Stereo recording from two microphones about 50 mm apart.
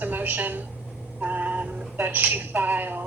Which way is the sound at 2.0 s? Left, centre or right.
Right.